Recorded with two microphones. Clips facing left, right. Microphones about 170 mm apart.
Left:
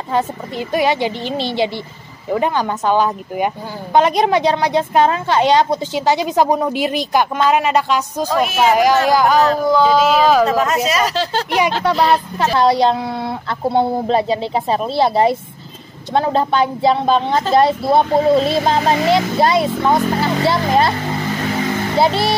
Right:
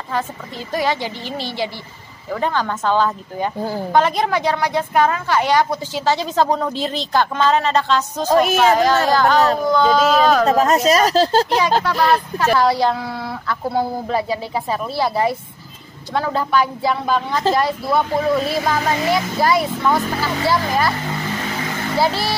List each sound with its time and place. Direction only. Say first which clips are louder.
0.1 s a woman's voice: left 5 dB; 20° left (ahead or behind)
10.4 s speech: right 1 dB; 35° right (ahead or behind)
11.8 s speech: left 2 dB; 20° left (ahead or behind)
21.9 s speech: left 3 dB; 20° left (ahead or behind)